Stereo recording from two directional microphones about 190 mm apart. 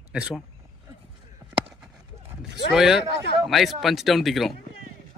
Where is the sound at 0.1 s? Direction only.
5° right (ahead or behind).